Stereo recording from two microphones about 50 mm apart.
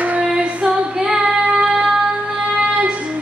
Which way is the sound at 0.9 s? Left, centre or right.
Centre.